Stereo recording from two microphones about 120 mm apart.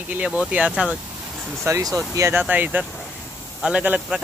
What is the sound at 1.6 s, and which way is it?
Speech, 25° right (ahead or behind).